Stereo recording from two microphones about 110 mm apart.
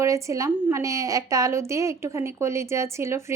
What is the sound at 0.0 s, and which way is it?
A woman's voice, 30° right (ahead or behind).